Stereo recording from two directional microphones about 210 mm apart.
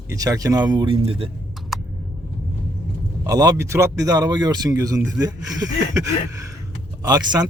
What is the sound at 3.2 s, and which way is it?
A man's voice, 15° right (ahead or behind).